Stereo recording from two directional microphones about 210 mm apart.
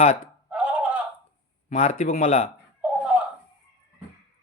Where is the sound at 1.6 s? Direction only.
30° left (ahead or behind).